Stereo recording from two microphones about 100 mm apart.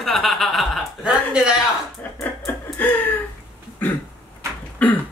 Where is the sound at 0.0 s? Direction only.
Centre (ahead or behind).